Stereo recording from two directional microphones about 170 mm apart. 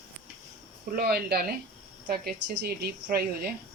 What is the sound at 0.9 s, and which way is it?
A woman's voice, 70° right (ahead or behind).